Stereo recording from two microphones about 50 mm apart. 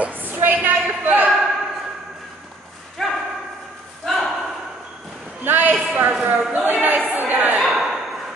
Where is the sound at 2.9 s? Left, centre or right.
Centre.